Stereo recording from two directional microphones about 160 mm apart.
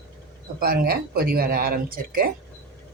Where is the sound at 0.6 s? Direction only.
75° right (ahead or behind).